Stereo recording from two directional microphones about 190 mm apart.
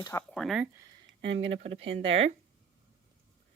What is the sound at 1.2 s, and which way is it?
Speech, 75° right (ahead or behind).